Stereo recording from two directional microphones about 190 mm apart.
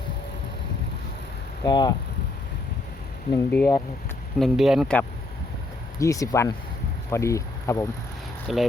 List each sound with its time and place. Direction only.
1.6 s speech: 20° left (ahead or behind)
3.3 s speech: 10° left (ahead or behind)
4.4 s speech: centre (ahead or behind)
6.0 s speech: 15° left (ahead or behind)
8.5 s speech: centre (ahead or behind)